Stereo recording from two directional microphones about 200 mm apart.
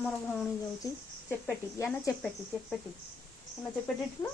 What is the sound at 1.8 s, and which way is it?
Speech, 15° left (ahead or behind).